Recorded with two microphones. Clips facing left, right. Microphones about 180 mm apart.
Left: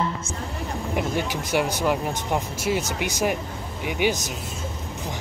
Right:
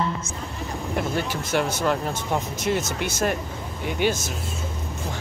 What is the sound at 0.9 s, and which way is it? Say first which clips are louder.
Speech: even; 15° left (ahead or behind).